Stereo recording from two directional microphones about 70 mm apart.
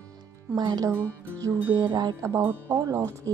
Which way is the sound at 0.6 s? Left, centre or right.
Right.